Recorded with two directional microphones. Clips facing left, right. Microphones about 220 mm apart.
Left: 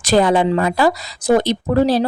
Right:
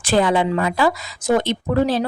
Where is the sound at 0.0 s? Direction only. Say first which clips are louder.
Left 3 dB; 40° left (ahead or behind).